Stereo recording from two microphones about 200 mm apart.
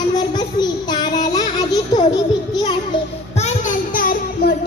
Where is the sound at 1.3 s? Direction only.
20° left (ahead or behind).